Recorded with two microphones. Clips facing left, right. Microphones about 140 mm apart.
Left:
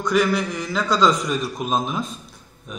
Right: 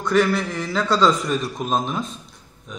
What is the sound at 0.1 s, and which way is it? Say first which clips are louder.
A man's voice: right 1 dB; centre (ahead or behind).